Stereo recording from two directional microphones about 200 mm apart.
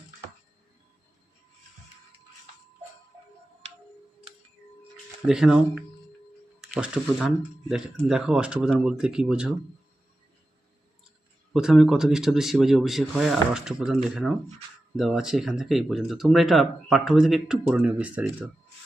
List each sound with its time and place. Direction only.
4.8 s a sound: 5° right (ahead or behind)
6.6 s speech: 5° right (ahead or behind)
11.5 s speech: 5° right (ahead or behind)